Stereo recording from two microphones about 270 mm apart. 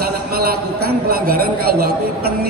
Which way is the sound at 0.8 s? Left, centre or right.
Right.